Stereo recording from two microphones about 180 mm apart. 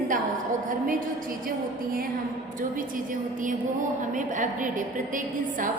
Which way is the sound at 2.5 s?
50° right (ahead or behind).